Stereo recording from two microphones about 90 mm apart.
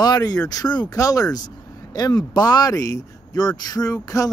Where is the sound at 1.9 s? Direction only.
50° left (ahead or behind).